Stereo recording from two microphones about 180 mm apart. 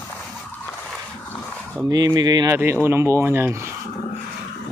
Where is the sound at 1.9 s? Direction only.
20° right (ahead or behind).